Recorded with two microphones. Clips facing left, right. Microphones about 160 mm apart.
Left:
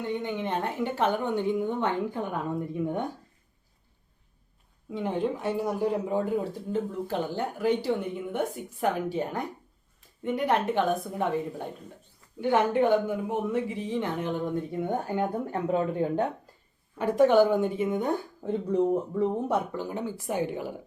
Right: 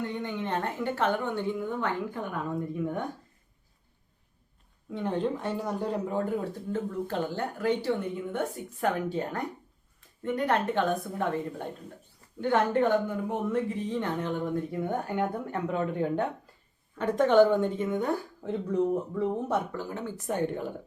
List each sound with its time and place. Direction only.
0.0 s speech: 15° left (ahead or behind)
4.9 s speech: 10° left (ahead or behind)
15.0 s speech: 30° left (ahead or behind)
17.0 s speech: 10° left (ahead or behind)
18.7 s speech: 25° left (ahead or behind); by 20.7 s 5° left (ahead or behind)